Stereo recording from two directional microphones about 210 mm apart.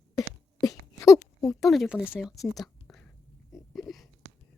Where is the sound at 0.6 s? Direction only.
15° left (ahead or behind).